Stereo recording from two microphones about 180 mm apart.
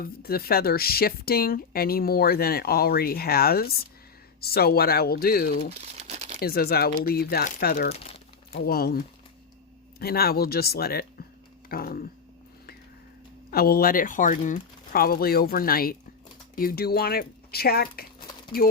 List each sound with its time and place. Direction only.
0.0 s speech: 55° left (ahead or behind)
5.7 s crumpling: 35° right (ahead or behind)
6.4 s speech: 60° left (ahead or behind)
7.9 s speech: 35° left (ahead or behind)
8.5 s speech: 60° left (ahead or behind)
13.5 s speech: 55° left (ahead or behind)